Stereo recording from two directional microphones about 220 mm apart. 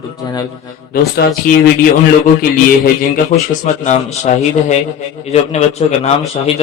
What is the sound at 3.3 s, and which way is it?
A man's voice, 30° left (ahead or behind).